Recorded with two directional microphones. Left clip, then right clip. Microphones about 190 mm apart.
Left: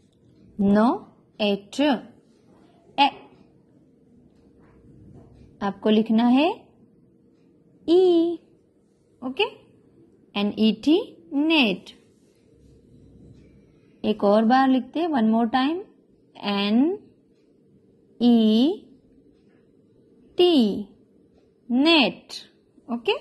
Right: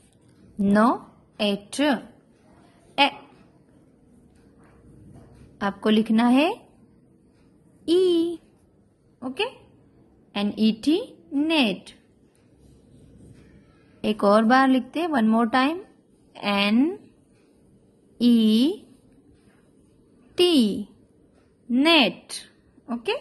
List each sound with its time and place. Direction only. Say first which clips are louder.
0.6 s a woman's voice: even; 10° right (ahead or behind)
5.6 s a woman's voice: left 1 dB; 15° right (ahead or behind)
7.8 s a woman's voice: left 2 dB; 15° right (ahead or behind)
9.2 s a woman's voice: left 3 dB; centre (ahead or behind)
14.0 s a woman's voice: right 1 dB; 20° right (ahead or behind)
18.1 s speech: left 1 dB; 20° right (ahead or behind)
20.3 s a woman's voice: left 1 dB; 20° right (ahead or behind)
21.6 s a sound: even; 15° right (ahead or behind)